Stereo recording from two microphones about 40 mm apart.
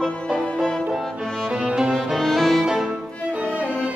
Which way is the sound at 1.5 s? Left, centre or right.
Right.